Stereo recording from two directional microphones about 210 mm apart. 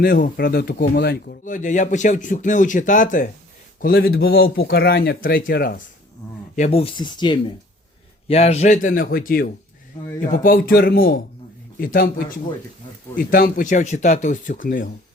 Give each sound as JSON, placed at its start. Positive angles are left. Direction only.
{"t": 0.0, "sound": "speech", "side_deg": 45}
{"t": 6.6, "sound": "speech", "side_deg": 30}
{"t": 13.1, "sound": "speech", "side_deg": 40}